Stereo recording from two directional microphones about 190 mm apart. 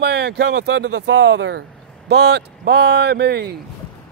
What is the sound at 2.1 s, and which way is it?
Speech, 60° right (ahead or behind).